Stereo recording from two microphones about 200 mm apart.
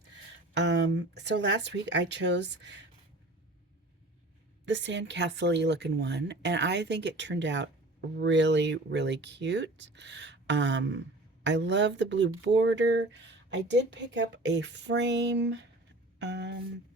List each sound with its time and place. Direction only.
0.5 s speech: 60° right (ahead or behind)
4.6 s speech: 65° right (ahead or behind)